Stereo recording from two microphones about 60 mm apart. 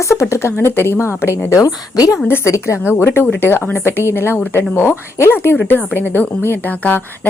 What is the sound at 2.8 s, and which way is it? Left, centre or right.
A woman's voice, left.